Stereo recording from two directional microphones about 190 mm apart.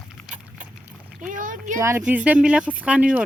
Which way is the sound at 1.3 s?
45° right (ahead or behind).